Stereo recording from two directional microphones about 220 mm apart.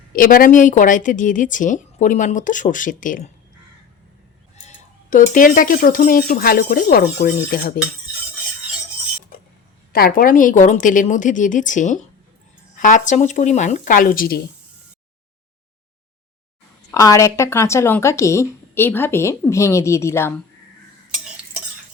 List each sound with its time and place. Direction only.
0.1 s a woman's voice: 40° left (ahead or behind)
5.1 s a woman's voice: 40° left (ahead or behind)
9.9 s a woman's voice: 40° left (ahead or behind)
16.9 s speech: 15° left (ahead or behind)